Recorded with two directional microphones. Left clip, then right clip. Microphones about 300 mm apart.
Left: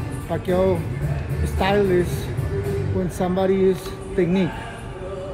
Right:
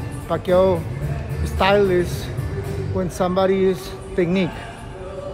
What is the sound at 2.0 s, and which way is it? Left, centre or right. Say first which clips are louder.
Speech: even; centre.